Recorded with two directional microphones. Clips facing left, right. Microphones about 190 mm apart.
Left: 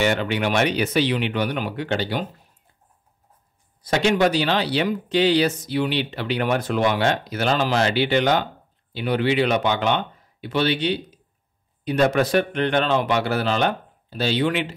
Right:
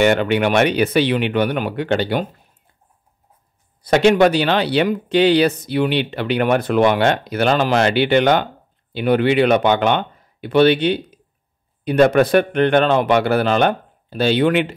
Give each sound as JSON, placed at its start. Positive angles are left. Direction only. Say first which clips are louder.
{"t": 0.0, "sound": "speech", "louder": "right 6 dB", "side_deg": -60}
{"t": 3.8, "sound": "speech", "louder": "right 6 dB", "side_deg": -60}